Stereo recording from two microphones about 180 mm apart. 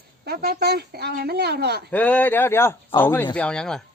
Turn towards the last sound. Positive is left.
turn(degrees=5)  # may be behind; listen again after turning